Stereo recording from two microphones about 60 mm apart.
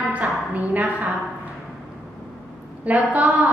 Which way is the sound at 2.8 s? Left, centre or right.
Right.